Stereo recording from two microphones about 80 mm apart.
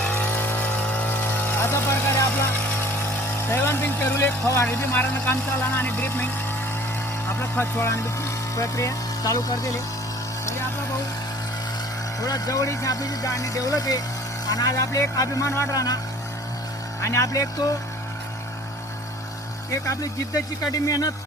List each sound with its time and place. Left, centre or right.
0.0 s a sound: left
3.4 s speech: left
7.3 s speech: left
10.4 s a sound: left
12.2 s speech: left
15.7 s speech: left
17.0 s speech: left
19.7 s speech: left